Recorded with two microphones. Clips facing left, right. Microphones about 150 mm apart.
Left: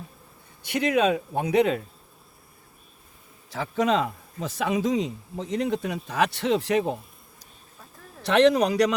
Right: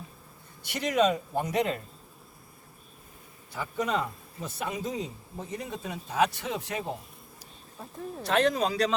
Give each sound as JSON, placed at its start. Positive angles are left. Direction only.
{"t": 0.8, "sound": "speech", "side_deg": 65}
{"t": 3.5, "sound": "a man's voice", "side_deg": 90}
{"t": 8.2, "sound": "speech", "side_deg": 70}